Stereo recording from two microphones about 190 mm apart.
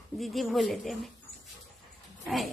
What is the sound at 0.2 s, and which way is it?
Speech, centre (ahead or behind).